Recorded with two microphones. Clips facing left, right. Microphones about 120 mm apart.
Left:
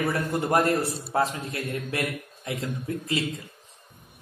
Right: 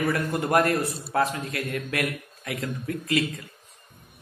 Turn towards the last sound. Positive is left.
turn(degrees=25)  # may be behind; listen again after turning